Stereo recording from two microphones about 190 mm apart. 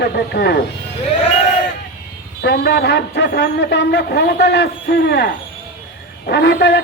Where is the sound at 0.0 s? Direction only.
60° left (ahead or behind).